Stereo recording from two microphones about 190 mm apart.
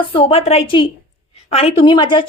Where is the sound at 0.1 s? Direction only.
30° left (ahead or behind).